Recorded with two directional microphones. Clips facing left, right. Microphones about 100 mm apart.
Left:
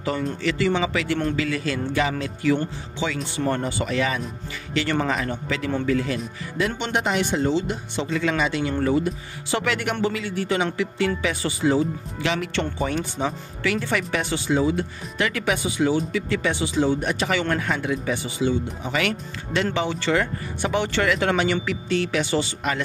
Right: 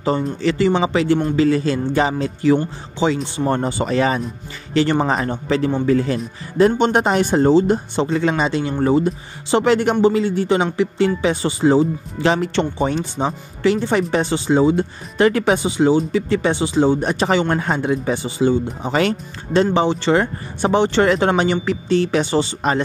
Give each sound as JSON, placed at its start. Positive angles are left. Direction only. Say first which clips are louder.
{"t": 0.0, "sound": "a man's voice", "louder": "right 6 dB", "side_deg": -30}